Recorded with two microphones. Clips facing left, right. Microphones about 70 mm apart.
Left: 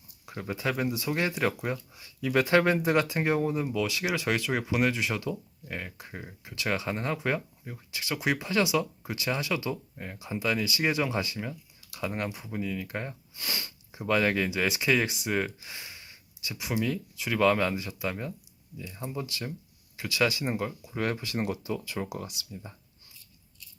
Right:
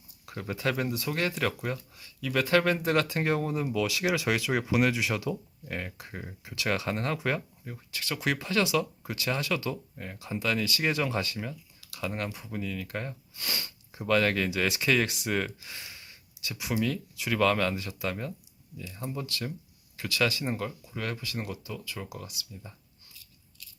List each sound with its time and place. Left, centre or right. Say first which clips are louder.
0.3 s speech: even; centre; by 2.7 s left
2.7 s speech: left 1 dB; centre
11.9 s speech: left 1 dB; centre
12.3 s speech: left 2 dB; centre
13.3 s speech: even; centre
20.9 s speech: left 4 dB; left